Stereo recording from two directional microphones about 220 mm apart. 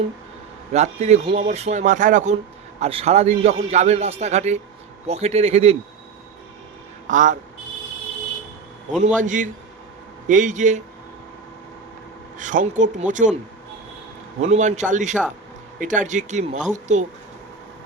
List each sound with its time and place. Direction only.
0.7 s a man's voice: 30° right (ahead or behind)
7.1 s speech: 35° right (ahead or behind)
9.2 s speech: 35° right (ahead or behind)
12.4 s speech: 35° right (ahead or behind)
14.4 s speech: 30° right (ahead or behind)